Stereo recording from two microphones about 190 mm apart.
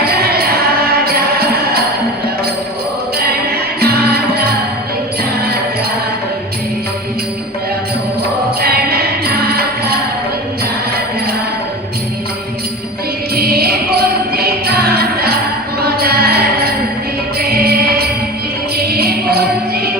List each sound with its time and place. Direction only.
0.0 s music: 55° right (ahead or behind)
3.2 s music: 55° right (ahead or behind)
8.6 s music: 55° right (ahead or behind)
13.3 s music: 55° right (ahead or behind)